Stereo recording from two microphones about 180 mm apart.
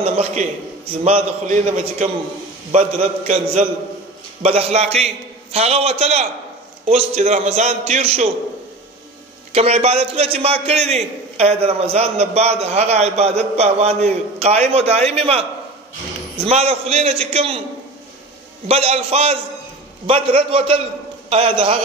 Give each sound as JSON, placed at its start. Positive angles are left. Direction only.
{"t": 0.0, "sound": "a man's voice", "side_deg": -40}
{"t": 9.5, "sound": "a man's voice", "side_deg": -35}
{"t": 16.4, "sound": "a man's voice", "side_deg": -35}
{"t": 18.7, "sound": "a man's voice", "side_deg": -35}